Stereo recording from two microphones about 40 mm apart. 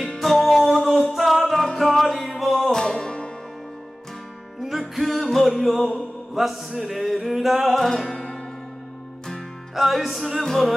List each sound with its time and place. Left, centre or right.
0.2 s music: centre
2.7 s music: centre
4.6 s music: centre
5.0 s a capella: centre
5.9 s mantra: centre
6.7 s music: centre
7.8 s music: centre
9.8 s music: centre
10.4 s music: centre